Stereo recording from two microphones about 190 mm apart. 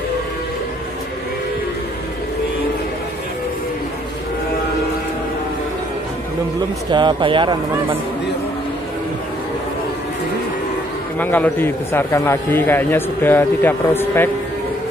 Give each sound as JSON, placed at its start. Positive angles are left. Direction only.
{"t": 6.9, "sound": "speech", "side_deg": -25}
{"t": 11.1, "sound": "a man's voice", "side_deg": 10}